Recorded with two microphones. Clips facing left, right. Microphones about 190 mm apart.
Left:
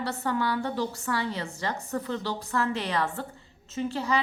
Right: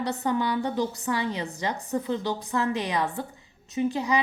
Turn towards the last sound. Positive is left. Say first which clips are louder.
# right 3 dB
turn(degrees=-15)  # may be behind; listen again after turning